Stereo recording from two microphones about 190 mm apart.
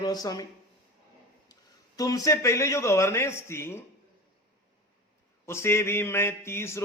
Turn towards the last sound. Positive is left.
turn(degrees=15)  # may be behind; listen again after turning